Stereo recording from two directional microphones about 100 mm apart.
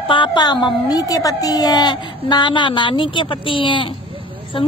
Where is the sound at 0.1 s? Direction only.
55° left (ahead or behind).